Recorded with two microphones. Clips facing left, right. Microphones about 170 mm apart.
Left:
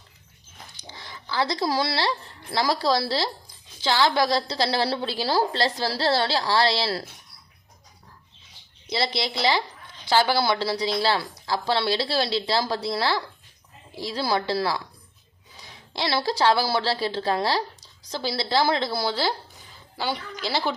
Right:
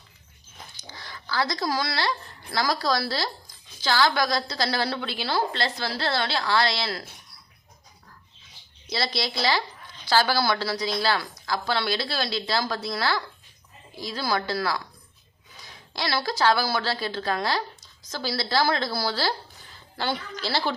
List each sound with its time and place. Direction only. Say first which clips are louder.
0.8 s speech: left 2 dB; 25° left (ahead or behind)
8.9 s a woman's voice: left 2 dB; 25° left (ahead or behind)
20.0 s a woman's voice: even; 10° left (ahead or behind)